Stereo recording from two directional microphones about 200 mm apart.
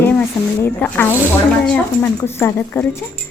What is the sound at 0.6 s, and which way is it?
Speech, 10° left (ahead or behind).